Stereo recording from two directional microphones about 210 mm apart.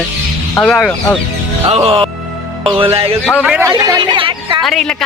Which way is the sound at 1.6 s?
25° right (ahead or behind).